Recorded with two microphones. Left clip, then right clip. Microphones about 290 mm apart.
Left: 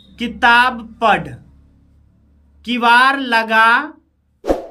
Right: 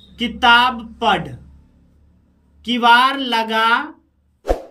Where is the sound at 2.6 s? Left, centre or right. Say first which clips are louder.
Left 1 dB; centre.